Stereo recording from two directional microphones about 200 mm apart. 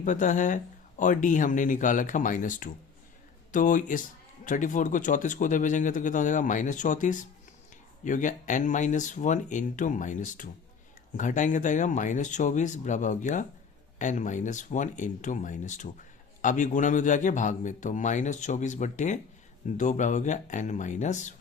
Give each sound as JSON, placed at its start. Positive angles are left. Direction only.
{"t": 0.0, "sound": "speech", "side_deg": 40}